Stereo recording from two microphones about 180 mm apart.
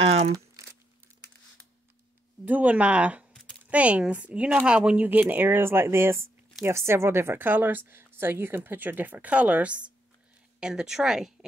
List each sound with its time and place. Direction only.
0.0 s crumpling: 35° right (ahead or behind)
2.4 s a woman's voice: 10° right (ahead or behind)